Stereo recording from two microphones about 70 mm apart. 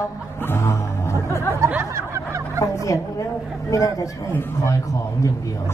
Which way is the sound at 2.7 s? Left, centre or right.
Left.